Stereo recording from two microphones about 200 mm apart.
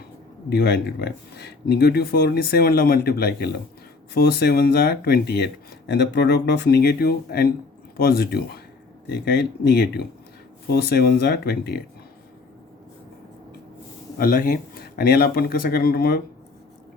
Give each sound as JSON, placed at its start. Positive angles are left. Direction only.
{"t": 0.5, "sound": "speech", "side_deg": 55}
{"t": 14.2, "sound": "speech", "side_deg": 45}